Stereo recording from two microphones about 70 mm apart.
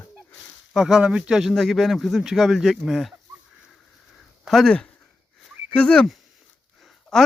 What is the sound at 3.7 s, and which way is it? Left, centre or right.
Sniff, centre.